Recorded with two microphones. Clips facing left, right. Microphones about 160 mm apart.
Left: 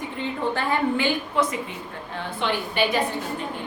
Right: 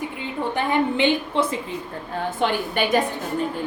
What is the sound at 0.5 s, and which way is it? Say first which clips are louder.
A woman's voice: right 4 dB; 20° right (ahead or behind).